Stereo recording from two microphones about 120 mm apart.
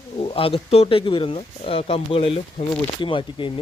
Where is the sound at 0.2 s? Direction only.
50° left (ahead or behind).